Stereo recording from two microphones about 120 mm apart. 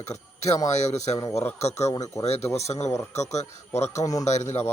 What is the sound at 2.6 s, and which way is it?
Speech, 65° left (ahead or behind).